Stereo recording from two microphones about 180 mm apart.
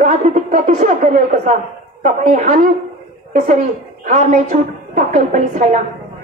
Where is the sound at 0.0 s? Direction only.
45° right (ahead or behind).